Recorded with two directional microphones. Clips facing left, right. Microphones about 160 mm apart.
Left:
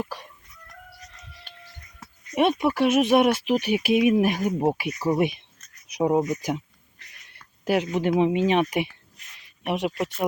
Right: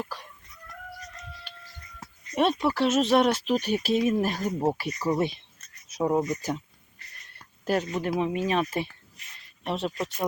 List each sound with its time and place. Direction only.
0.0 s chicken: 20° left (ahead or behind)
1.5 s a sound: 50° left (ahead or behind)
2.3 s speech: 10° left (ahead or behind)
7.6 s speech: 15° left (ahead or behind)